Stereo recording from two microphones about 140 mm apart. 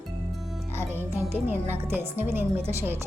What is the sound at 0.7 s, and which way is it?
A woman's voice, 15° right (ahead or behind).